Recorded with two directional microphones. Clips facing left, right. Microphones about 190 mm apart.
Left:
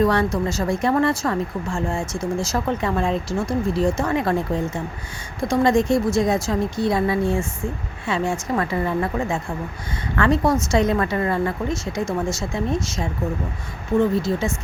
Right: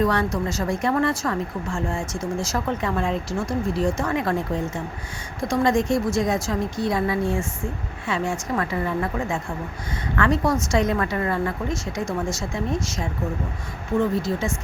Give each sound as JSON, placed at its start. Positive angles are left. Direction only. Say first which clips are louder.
{"t": 0.0, "sound": "speech", "louder": "left 3 dB", "side_deg": 30}
{"t": 5.5, "sound": "speech", "louder": "left 3 dB", "side_deg": 30}
{"t": 14.2, "sound": "speech", "louder": "left 2 dB", "side_deg": 25}